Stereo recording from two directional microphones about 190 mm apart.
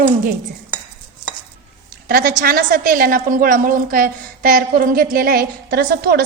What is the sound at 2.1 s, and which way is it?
A woman's voice, 50° right (ahead or behind).